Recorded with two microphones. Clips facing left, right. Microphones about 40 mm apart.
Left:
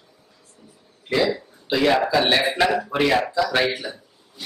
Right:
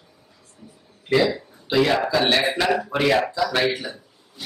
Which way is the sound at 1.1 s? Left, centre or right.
Centre.